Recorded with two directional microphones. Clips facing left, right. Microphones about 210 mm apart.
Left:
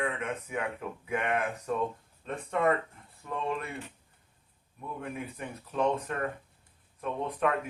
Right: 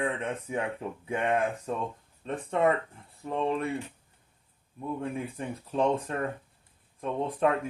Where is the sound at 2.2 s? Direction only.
30° right (ahead or behind).